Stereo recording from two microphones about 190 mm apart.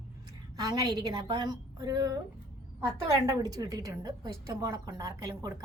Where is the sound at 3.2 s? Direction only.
20° right (ahead or behind).